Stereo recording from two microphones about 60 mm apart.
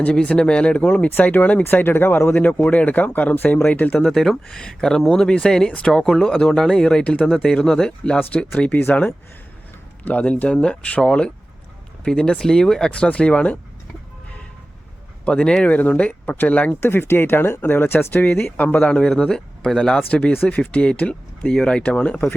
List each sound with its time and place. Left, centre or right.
0.1 s speech: centre
1.6 s speech: left
2.6 s speech: left
4.0 s speech: centre
6.0 s speech: centre
6.2 s speech: centre
15.3 s speech: centre
16.8 s speech: left; by 22.2 s centre